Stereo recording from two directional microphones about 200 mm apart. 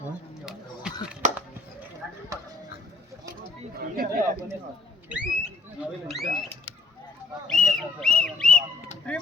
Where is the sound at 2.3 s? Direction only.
15° right (ahead or behind).